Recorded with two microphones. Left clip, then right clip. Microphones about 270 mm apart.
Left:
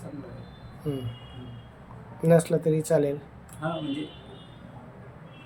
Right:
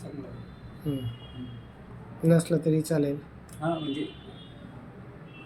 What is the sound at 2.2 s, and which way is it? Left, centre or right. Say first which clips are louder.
Speech: left 3 dB; centre.